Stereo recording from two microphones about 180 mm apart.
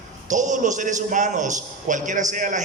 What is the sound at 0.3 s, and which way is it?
A man's voice, 45° right (ahead or behind).